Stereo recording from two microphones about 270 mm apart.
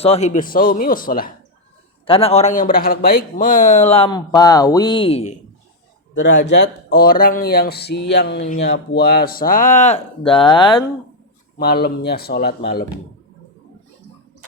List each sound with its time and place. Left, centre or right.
0.0 s speech: left
2.0 s speech: left
6.1 s speech: left; by 10.8 s centre
11.5 s speech: left